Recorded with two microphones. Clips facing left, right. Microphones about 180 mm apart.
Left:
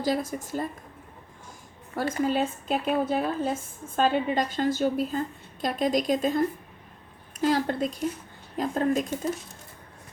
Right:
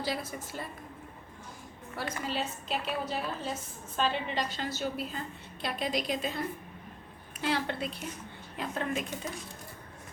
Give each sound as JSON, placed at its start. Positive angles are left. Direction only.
{"t": 0.0, "sound": "a woman's voice", "side_deg": 45}
{"t": 2.0, "sound": "a woman's voice", "side_deg": 45}